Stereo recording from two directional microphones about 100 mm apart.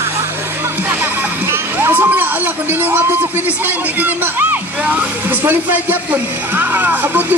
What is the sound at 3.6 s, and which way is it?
Speech, 20° right (ahead or behind).